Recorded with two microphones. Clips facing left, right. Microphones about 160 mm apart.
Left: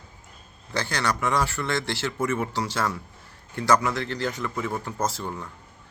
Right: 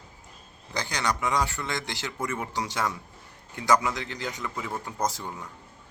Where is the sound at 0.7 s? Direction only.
15° right (ahead or behind).